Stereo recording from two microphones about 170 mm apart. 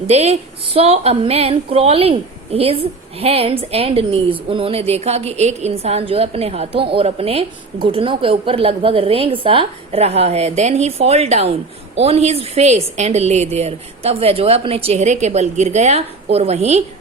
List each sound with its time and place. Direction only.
0.1 s a woman's voice: 35° right (ahead or behind)